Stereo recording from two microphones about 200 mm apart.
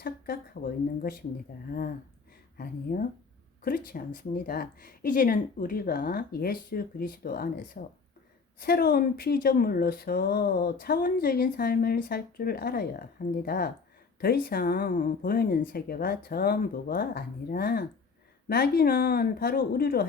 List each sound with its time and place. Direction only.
0.0 s speech: 45° left (ahead or behind)
2.6 s speech: 45° left (ahead or behind)